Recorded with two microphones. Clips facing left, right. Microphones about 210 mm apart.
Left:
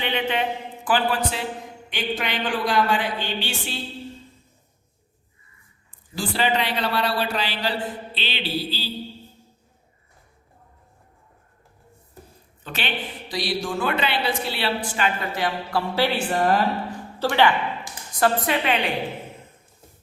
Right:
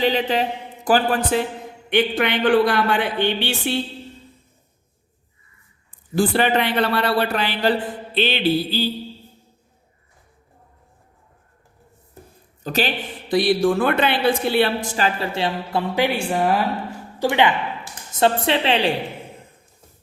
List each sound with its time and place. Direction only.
0.0 s a man's voice: 35° right (ahead or behind)
0.9 s speech: 45° right (ahead or behind)
1.9 s a man's voice: 60° right (ahead or behind)
6.1 s a man's voice: 55° right (ahead or behind)
12.6 s a man's voice: 40° right (ahead or behind)
13.2 s a woman's voice: 55° right (ahead or behind); by 18.9 s 30° right (ahead or behind)